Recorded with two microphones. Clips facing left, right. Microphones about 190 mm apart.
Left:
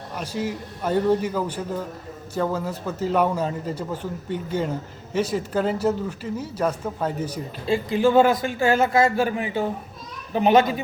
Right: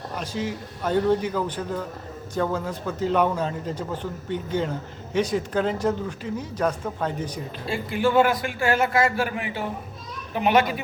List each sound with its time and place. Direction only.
0.2 s a man's voice: 5° left (ahead or behind)
7.7 s a man's voice: 25° left (ahead or behind)